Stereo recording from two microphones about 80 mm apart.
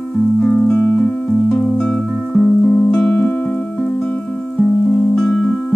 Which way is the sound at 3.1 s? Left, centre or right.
Left.